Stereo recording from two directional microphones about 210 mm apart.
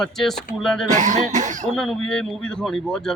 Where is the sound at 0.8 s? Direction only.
35° right (ahead or behind).